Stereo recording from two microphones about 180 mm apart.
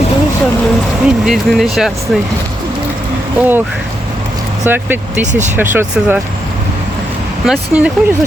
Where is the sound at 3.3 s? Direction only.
10° right (ahead or behind).